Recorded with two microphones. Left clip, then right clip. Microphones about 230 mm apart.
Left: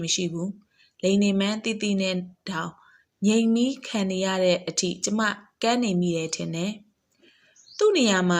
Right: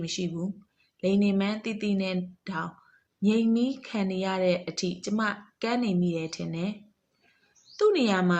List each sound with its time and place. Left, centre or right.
0.0 s speech: centre
7.8 s speech: centre